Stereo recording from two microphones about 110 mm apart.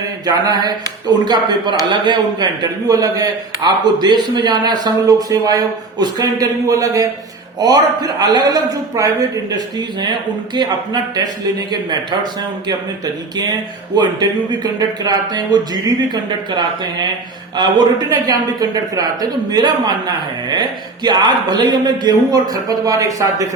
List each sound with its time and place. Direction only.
0.3 s a man's voice: 35° right (ahead or behind)